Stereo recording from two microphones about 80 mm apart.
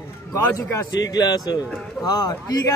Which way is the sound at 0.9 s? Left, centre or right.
Left.